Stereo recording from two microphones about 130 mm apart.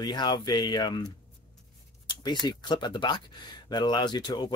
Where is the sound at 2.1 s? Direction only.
35° left (ahead or behind).